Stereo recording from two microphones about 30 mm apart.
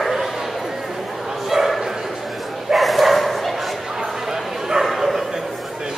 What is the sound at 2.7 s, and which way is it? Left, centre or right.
Bow-wow, centre.